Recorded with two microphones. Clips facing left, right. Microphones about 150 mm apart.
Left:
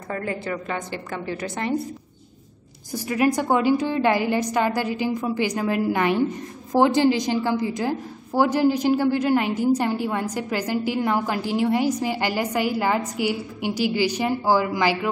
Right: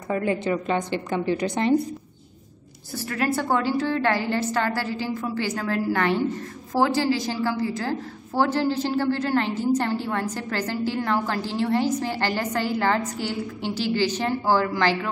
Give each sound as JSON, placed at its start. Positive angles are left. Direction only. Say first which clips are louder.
{"t": 0.1, "sound": "a woman's voice", "louder": "right 4 dB", "side_deg": -20}
{"t": 2.9, "sound": "a woman's voice", "louder": "left 4 dB", "side_deg": 15}